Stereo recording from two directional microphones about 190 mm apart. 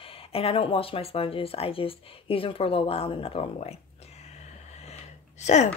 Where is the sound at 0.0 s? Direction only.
30° left (ahead or behind).